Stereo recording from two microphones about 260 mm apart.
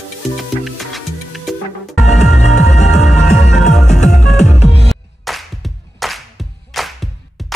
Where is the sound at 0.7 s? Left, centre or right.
Centre.